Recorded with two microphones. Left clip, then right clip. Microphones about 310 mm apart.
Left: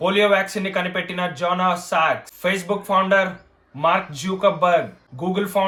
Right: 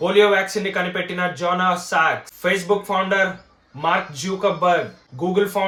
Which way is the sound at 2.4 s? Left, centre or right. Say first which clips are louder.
Right 3 dB; centre.